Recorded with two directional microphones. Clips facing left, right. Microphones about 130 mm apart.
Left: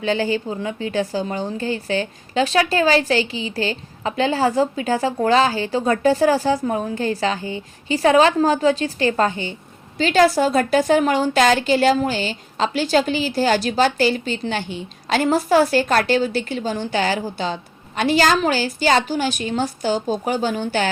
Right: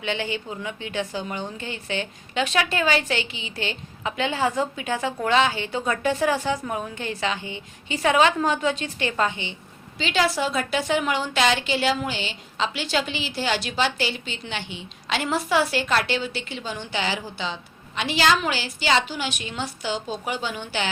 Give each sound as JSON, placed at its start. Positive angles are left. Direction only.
{"t": 0.0, "sound": "a woman's voice", "side_deg": 40}